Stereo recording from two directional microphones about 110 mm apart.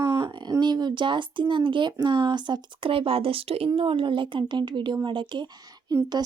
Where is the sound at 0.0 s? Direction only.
30° right (ahead or behind).